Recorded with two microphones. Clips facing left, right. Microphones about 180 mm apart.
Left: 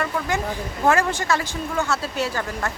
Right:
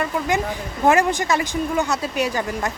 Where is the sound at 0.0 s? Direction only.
15° right (ahead or behind).